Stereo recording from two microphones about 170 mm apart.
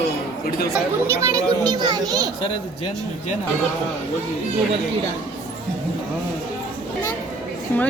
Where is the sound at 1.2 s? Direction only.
20° right (ahead or behind).